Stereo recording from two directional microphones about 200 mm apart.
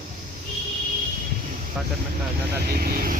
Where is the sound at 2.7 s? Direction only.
50° right (ahead or behind).